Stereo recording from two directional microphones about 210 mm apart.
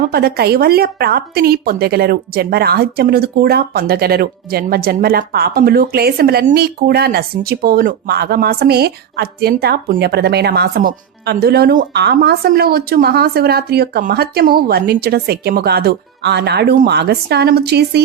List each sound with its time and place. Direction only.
0.1 s speech: 50° right (ahead or behind)